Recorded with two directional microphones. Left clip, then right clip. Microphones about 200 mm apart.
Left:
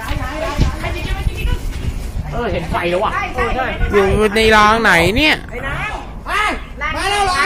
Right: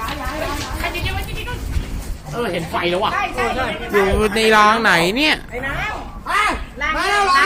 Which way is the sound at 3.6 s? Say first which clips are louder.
Left 4 dB; 15° left (ahead or behind).